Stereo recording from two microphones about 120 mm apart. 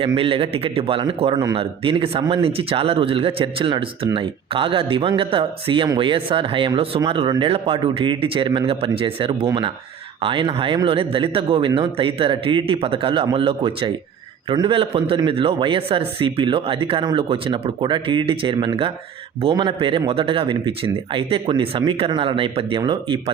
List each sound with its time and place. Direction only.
0.0 s a man's voice: 50° right (ahead or behind)